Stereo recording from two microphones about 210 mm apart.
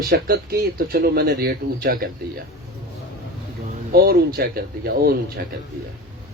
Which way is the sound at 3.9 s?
45° right (ahead or behind).